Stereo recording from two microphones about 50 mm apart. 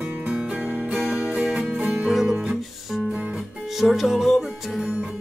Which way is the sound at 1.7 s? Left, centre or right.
Right.